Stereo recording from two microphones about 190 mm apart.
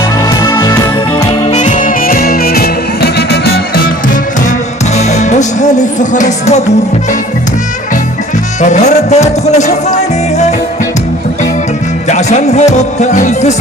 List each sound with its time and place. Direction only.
0.4 s music: 20° left (ahead or behind)
1.3 s music: 35° left (ahead or behind); by 3.6 s 60° left (ahead or behind)
4.9 s music: 40° left (ahead or behind)
8.6 s music: 40° left (ahead or behind)
12.0 s music: 40° left (ahead or behind)